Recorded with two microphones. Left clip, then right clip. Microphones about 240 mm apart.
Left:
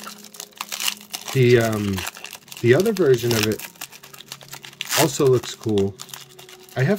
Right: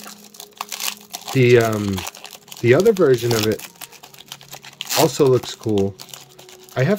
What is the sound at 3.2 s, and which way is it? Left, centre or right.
Speech, centre.